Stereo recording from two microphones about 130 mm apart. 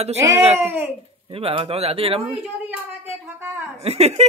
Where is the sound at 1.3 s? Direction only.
45° right (ahead or behind).